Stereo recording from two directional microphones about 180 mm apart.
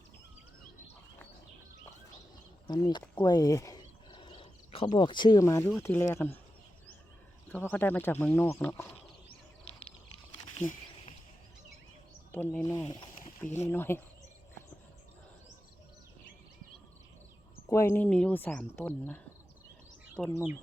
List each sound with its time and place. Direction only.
2.6 s speech: 25° left (ahead or behind)
3.2 s a sound: 20° left (ahead or behind)
5.8 s speech: 15° left (ahead or behind)
7.4 s speech: 10° left (ahead or behind)
12.3 s speech: 10° left (ahead or behind)
17.7 s speech: 15° left (ahead or behind)